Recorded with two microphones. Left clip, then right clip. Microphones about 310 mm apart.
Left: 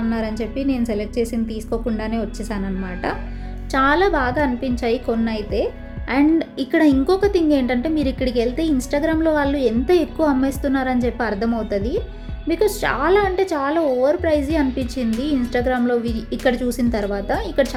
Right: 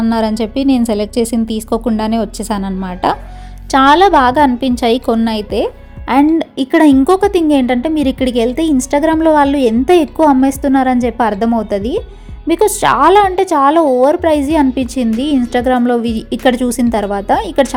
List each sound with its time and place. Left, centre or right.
0.0 s a woman's voice: right